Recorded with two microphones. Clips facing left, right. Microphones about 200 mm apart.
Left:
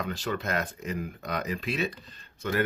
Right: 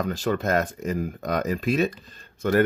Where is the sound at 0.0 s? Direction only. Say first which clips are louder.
Right 7 dB; 45° right (ahead or behind).